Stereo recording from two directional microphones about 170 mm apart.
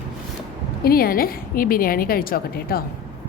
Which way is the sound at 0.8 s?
60° left (ahead or behind).